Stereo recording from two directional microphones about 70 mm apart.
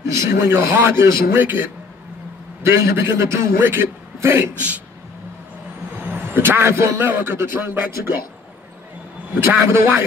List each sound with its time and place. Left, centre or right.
0.1 s a man's voice: right
1.3 s a man's voice: right
2.6 s a man's voice: right
4.6 s a man's voice: right
6.0 s a man's voice: right
9.7 s a man's voice: right